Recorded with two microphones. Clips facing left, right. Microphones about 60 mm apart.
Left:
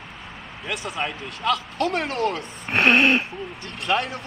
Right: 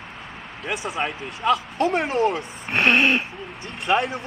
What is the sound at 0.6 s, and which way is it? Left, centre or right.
A man's voice, centre.